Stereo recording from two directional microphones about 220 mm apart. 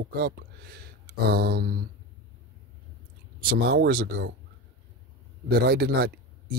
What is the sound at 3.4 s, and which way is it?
Speech, 45° right (ahead or behind).